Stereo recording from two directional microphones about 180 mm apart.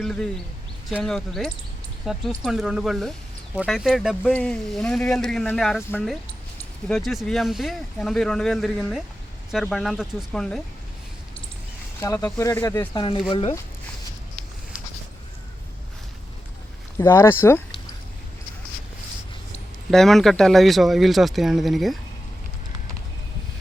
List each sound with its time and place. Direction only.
0.0 s speech: 5° left (ahead or behind)
6.8 s speech: centre (ahead or behind)
11.9 s speech: 15° left (ahead or behind)
17.0 s speech: 15° left (ahead or behind)
19.9 s speech: centre (ahead or behind)